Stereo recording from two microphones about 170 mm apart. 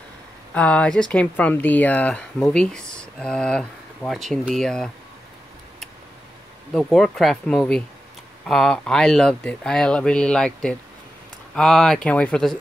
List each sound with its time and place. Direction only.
0.6 s speech: 5° left (ahead or behind)
6.7 s speech: centre (ahead or behind)